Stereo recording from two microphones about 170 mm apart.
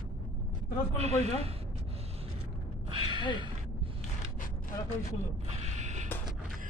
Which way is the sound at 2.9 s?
30° right (ahead or behind).